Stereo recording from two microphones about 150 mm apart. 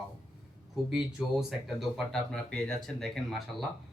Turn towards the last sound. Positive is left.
turn(degrees=0)  # may be behind; listen again after turning